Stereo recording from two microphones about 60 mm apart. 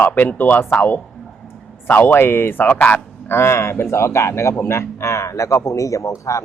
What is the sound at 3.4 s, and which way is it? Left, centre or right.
Speech, left.